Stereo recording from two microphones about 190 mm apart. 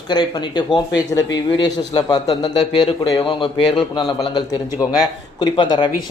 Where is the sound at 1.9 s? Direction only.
20° left (ahead or behind).